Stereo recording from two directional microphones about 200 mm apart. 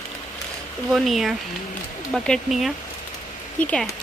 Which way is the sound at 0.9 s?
Centre (ahead or behind).